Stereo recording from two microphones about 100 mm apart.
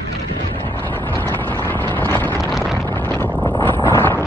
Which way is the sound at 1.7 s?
20° left (ahead or behind).